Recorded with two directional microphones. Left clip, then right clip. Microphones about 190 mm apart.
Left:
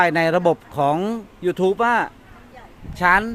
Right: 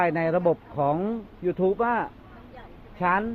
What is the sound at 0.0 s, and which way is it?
Speech, 45° left (ahead or behind).